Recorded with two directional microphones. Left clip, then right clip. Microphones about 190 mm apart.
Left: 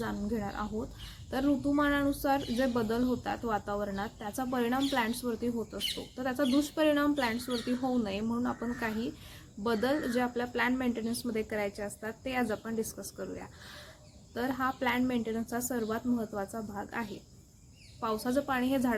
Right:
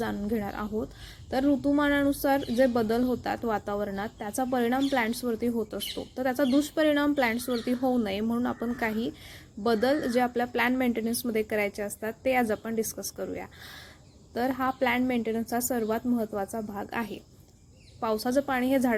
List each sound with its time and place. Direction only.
0.0 s speech: 35° right (ahead or behind)